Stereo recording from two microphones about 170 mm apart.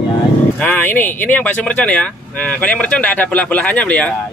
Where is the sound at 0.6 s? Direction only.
10° left (ahead or behind).